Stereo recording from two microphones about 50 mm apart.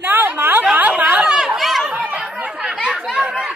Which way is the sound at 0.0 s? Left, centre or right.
Right.